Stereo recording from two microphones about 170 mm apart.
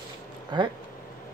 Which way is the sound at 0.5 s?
25° right (ahead or behind).